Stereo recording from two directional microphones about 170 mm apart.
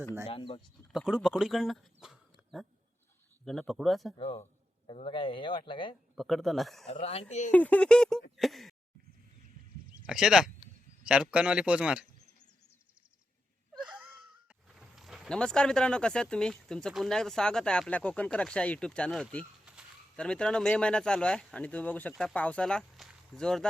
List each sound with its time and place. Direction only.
0.3 s speech: 30° left (ahead or behind)
0.9 s speech: 5° right (ahead or behind)
4.2 s a man's voice: 35° left (ahead or behind)
6.1 s speech: centre (ahead or behind)
6.8 s speech: 40° left (ahead or behind)
7.5 s speech: 10° left (ahead or behind)
9.9 s speech: 5° right (ahead or behind)
13.8 s wheeze: 5° right (ahead or behind)
14.7 s speech: 5° right (ahead or behind)